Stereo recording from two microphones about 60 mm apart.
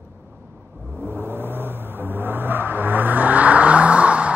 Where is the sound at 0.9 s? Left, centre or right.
Right.